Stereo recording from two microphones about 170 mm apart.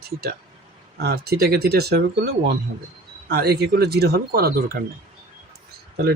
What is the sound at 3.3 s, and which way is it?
Speech, 65° right (ahead or behind).